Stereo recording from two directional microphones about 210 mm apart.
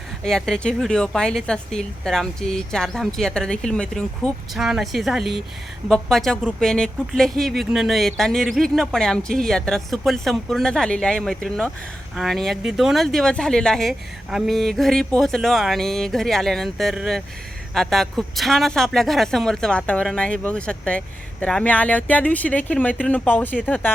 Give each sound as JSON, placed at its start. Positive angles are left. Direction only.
{"t": 0.3, "sound": "speech", "side_deg": 0}